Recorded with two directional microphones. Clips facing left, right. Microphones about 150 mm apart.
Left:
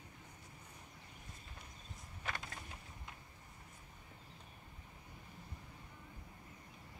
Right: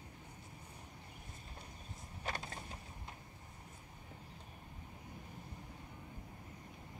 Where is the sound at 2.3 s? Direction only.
30° right (ahead or behind).